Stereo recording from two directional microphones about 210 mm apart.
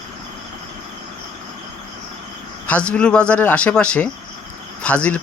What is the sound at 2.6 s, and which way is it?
Speech, 5° left (ahead or behind).